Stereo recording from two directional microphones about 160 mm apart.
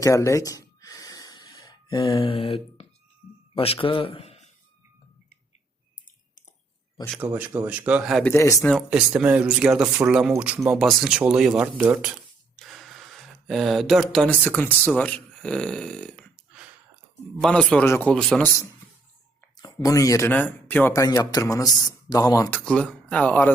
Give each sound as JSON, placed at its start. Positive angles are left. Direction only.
{"t": 0.0, "sound": "gasp", "side_deg": 20}
{"t": 3.5, "sound": "a man's voice", "side_deg": 35}
{"t": 7.2, "sound": "speech", "side_deg": -10}
{"t": 8.3, "sound": "speech", "side_deg": 20}
{"t": 8.6, "sound": "speech", "side_deg": 0}
{"t": 17.4, "sound": "speech", "side_deg": 5}
{"t": 19.5, "sound": "speech", "side_deg": 25}